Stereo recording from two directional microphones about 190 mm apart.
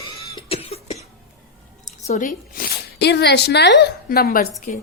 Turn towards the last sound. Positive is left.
turn(degrees=55)  # may be behind; listen again after turning